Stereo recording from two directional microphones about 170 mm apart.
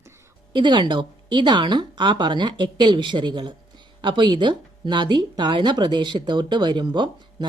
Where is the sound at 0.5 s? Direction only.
25° right (ahead or behind).